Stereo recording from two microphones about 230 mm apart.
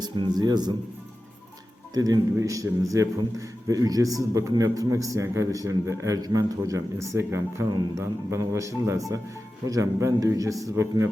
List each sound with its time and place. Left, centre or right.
0.0 s a man's voice: centre
1.9 s a man's voice: centre